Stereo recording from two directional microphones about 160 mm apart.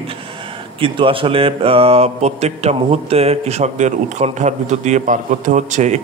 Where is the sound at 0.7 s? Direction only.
35° right (ahead or behind).